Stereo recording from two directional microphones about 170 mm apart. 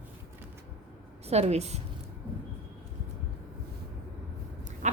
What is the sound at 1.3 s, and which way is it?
Speech, 40° right (ahead or behind).